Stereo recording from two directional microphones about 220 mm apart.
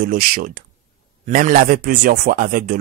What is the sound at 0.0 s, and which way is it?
A man's voice, 40° right (ahead or behind).